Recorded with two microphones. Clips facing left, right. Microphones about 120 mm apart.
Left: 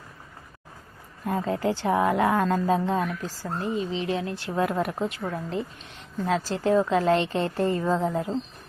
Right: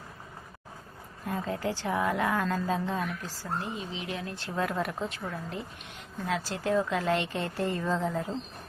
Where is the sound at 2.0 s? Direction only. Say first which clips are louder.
Left 5 dB; 25° left (ahead or behind).